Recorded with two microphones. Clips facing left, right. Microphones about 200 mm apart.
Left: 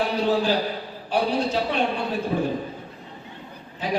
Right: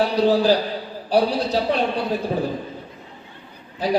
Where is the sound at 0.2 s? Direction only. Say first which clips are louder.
Right 6 dB; 35° right (ahead or behind).